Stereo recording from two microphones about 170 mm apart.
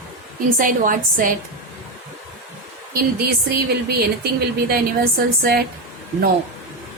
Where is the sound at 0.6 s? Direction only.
50° right (ahead or behind).